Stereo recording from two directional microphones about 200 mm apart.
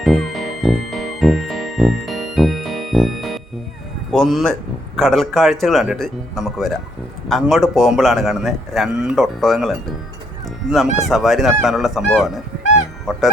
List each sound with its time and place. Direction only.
0.0 s music: centre (ahead or behind)
4.1 s speech: centre (ahead or behind)
10.8 s speech: 35° left (ahead or behind)
11.1 s speech: centre (ahead or behind)
13.1 s goose: centre (ahead or behind)